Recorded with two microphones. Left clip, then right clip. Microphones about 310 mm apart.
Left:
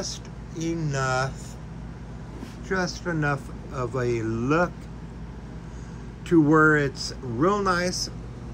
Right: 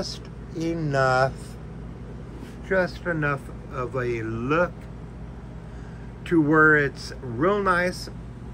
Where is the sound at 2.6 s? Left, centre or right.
Centre.